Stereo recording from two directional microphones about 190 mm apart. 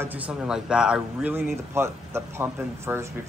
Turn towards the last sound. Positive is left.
turn(degrees=-10)  # may be behind; listen again after turning